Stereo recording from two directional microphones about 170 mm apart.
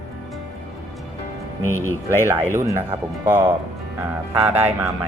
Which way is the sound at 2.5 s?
15° right (ahead or behind).